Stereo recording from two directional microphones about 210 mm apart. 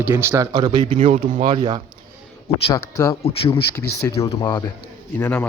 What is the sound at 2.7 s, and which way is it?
Speech, 15° left (ahead or behind).